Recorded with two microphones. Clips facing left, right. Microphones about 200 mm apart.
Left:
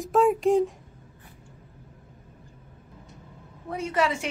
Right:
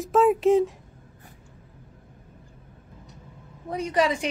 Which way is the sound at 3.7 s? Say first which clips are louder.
Right 2 dB; 15° right (ahead or behind).